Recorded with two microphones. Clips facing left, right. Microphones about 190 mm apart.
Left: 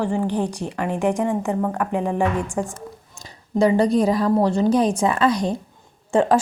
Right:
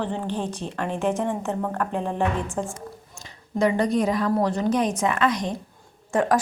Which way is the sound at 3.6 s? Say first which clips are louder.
Left 4 dB; 30° left (ahead or behind).